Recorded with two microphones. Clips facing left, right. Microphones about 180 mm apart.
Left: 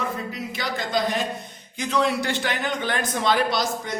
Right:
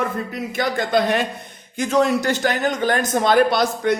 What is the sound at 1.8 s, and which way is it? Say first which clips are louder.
A man's voice: right 5 dB; 45° right (ahead or behind).